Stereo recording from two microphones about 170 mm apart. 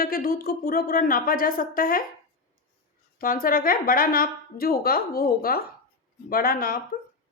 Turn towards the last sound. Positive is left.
turn(degrees=60)  # may be behind; listen again after turning